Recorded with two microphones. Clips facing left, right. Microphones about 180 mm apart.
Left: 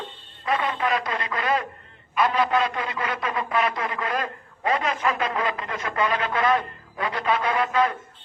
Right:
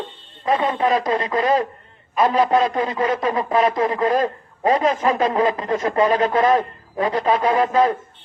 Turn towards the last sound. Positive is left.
turn(degrees=-35)  # may be behind; listen again after turning